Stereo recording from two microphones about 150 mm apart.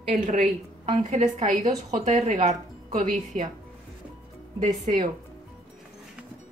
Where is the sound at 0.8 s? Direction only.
50° right (ahead or behind).